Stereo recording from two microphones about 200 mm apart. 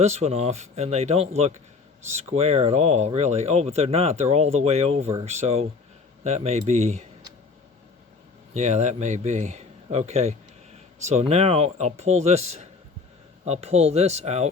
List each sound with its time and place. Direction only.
0.0 s speech: 35° right (ahead or behind)
8.5 s speech: 35° right (ahead or behind)